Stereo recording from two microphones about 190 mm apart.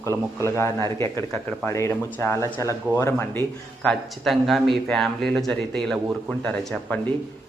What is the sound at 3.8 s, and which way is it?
Speech, centre (ahead or behind).